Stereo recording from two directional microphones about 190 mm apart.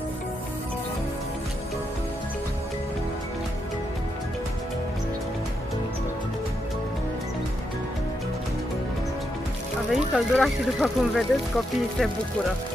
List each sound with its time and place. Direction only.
9.8 s speech: centre (ahead or behind)